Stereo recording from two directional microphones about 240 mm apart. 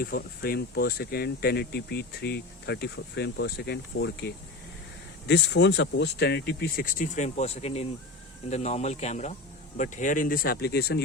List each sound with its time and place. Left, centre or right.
0.0 s speech: left